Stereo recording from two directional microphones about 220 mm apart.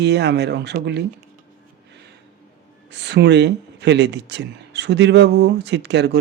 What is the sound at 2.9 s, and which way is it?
Speech, 50° right (ahead or behind).